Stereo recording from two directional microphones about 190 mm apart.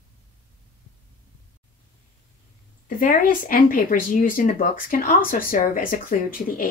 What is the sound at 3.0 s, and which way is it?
Speech, 45° left (ahead or behind).